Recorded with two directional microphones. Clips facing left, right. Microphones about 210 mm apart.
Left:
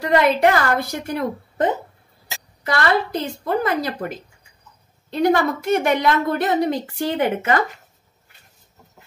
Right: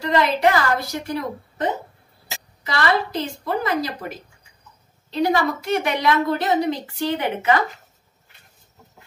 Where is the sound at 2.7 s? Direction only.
55° left (ahead or behind).